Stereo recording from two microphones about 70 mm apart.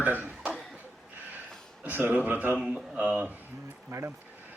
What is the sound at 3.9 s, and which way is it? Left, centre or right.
Speech, right.